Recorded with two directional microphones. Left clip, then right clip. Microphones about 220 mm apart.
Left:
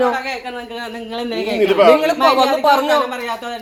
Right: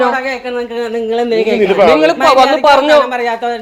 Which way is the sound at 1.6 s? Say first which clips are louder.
Right 1 dB; 20° right (ahead or behind).